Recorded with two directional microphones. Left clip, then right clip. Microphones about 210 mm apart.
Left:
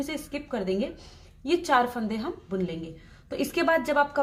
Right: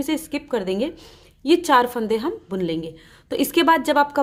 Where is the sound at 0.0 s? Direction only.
40° right (ahead or behind).